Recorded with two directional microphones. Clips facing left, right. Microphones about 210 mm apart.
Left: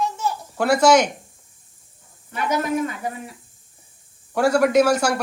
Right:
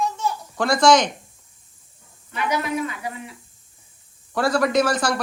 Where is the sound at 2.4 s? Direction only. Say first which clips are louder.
Left 2 dB; 45° left (ahead or behind).